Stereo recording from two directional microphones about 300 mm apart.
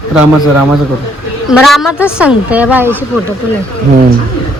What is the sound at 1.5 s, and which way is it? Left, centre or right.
A woman's voice, centre.